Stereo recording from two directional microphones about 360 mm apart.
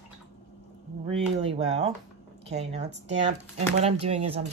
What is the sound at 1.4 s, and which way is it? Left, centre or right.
Speech, centre.